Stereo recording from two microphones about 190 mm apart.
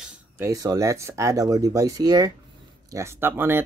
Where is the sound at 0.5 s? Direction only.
20° right (ahead or behind).